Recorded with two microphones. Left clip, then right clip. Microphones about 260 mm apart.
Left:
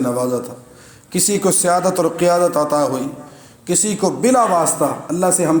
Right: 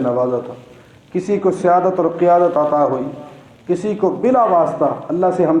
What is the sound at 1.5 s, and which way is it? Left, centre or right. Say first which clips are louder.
Speech: right 1 dB; left.